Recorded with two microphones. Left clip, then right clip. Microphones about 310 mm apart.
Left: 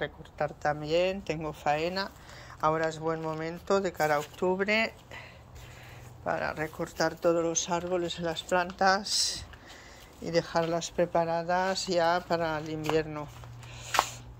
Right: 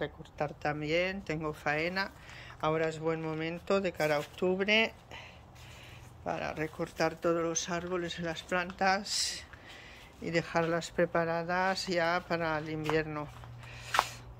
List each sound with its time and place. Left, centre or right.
0.0 s speech: centre
6.2 s speech: centre
13.9 s a sound: left